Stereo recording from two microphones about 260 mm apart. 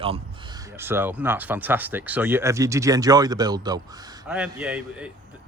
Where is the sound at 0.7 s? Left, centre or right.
Centre.